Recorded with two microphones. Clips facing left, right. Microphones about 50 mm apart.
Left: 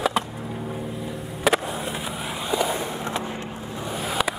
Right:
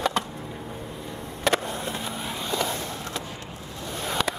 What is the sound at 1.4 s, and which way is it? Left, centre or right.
Skateboard, centre.